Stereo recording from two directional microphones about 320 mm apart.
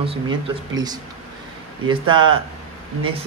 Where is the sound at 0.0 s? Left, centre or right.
Centre.